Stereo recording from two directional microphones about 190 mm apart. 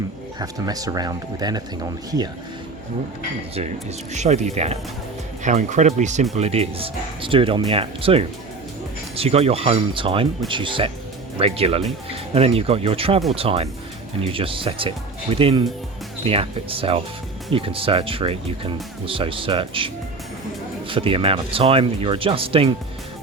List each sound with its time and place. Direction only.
0.3 s speech: 20° right (ahead or behind)
3.5 s speech: 35° right (ahead or behind)